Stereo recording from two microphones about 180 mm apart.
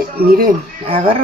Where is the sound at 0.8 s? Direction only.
30° right (ahead or behind).